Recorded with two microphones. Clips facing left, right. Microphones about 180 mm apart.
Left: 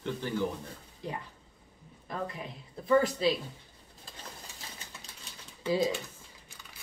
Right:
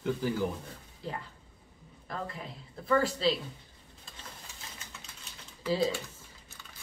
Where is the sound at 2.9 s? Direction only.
15° left (ahead or behind).